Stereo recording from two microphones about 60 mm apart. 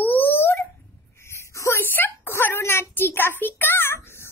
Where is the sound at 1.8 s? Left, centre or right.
Left.